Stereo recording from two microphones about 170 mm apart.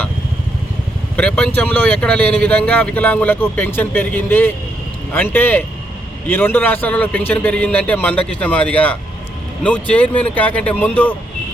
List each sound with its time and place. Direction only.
1.1 s speech: 5° left (ahead or behind)